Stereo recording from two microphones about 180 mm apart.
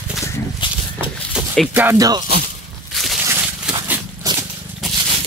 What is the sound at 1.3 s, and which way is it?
Speech, 5° right (ahead or behind).